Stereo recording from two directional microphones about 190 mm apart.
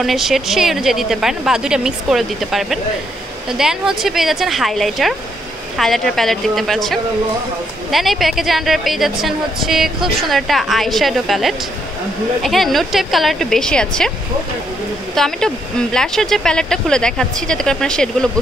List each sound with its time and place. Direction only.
0.0 s a woman's voice: centre (ahead or behind)
15.1 s a woman's voice: 5° left (ahead or behind)